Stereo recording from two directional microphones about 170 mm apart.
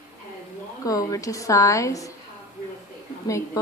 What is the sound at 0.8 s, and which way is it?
Speech, 20° left (ahead or behind).